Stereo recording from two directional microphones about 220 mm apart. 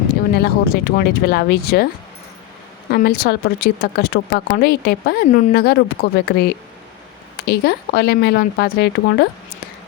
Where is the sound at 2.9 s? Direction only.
45° left (ahead or behind).